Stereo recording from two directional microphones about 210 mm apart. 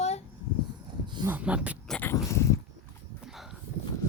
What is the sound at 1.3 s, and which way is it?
Speech, 5° right (ahead or behind).